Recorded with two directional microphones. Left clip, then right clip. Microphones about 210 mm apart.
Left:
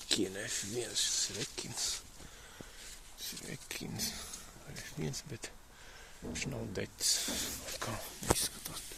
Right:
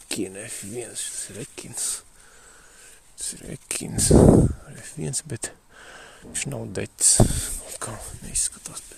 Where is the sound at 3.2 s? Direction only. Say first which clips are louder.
Right 8 dB; 40° right (ahead or behind).